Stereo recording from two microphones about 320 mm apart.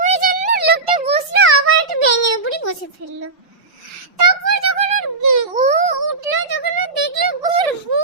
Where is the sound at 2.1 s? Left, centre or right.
Left.